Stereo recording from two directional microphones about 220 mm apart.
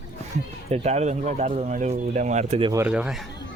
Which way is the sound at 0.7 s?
30° right (ahead or behind).